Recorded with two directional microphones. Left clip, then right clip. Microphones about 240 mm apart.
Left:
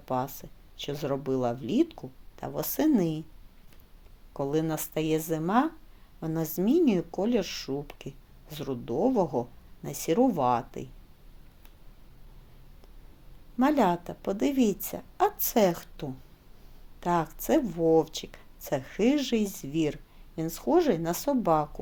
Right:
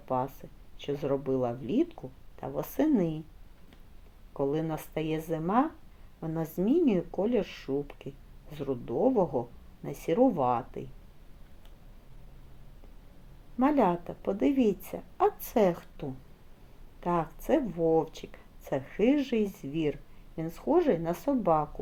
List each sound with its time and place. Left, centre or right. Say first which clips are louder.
0.0 s speech: even; left
4.4 s speech: left 2 dB; left
13.6 s speech: left 1 dB; left